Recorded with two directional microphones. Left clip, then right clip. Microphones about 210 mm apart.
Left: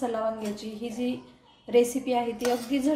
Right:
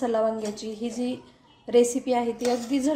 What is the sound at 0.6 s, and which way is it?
A woman's voice, 20° right (ahead or behind).